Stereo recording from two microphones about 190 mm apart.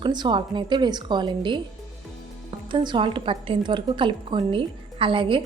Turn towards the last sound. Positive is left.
turn(degrees=-25)  # may be behind; listen again after turning